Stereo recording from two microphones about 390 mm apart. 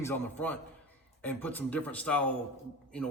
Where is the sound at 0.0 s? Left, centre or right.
Centre.